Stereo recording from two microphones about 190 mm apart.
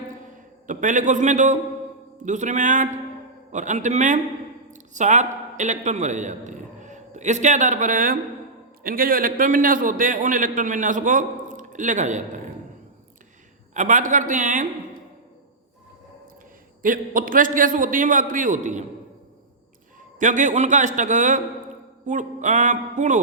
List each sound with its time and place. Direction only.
0.7 s a man's voice: 40° right (ahead or behind)
13.7 s a man's voice: 45° right (ahead or behind)
16.8 s a man's voice: 45° right (ahead or behind)
20.1 s a man's voice: 40° right (ahead or behind)